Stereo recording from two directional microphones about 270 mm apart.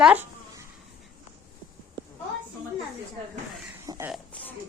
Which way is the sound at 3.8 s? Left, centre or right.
Centre.